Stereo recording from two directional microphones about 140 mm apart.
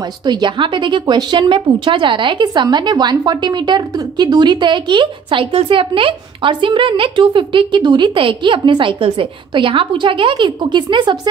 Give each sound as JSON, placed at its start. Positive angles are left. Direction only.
{"t": 0.0, "sound": "speech", "side_deg": -30}